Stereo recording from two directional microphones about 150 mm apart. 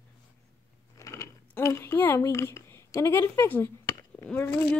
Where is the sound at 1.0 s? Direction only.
20° left (ahead or behind).